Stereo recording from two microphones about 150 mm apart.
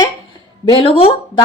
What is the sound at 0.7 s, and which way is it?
Speech, 35° left (ahead or behind).